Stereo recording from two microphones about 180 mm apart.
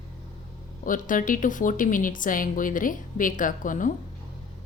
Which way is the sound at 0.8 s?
50° left (ahead or behind).